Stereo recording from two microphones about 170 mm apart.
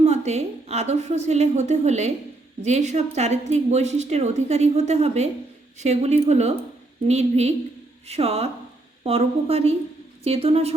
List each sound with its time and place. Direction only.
0.0 s speech: 40° right (ahead or behind)